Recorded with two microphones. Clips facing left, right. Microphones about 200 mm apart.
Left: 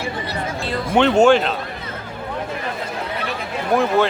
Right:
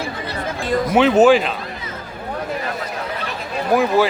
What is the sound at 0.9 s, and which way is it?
Speech, 5° right (ahead or behind).